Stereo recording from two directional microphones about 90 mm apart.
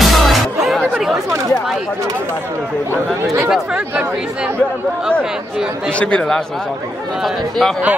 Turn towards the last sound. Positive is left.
turn(degrees=10)  # may be behind; listen again after turning